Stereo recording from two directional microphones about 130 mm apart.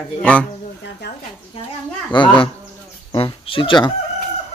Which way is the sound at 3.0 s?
40° left (ahead or behind).